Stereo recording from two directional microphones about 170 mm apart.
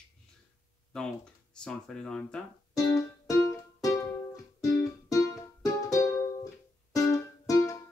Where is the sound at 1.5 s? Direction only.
5° left (ahead or behind).